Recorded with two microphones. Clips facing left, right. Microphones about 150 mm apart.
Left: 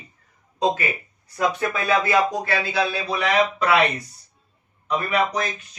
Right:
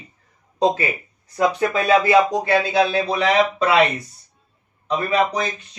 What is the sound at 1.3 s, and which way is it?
A man's voice, 20° right (ahead or behind).